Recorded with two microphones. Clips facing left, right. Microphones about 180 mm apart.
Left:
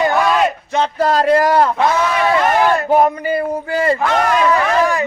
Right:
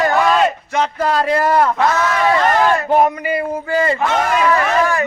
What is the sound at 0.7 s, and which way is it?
Speech, 30° left (ahead or behind).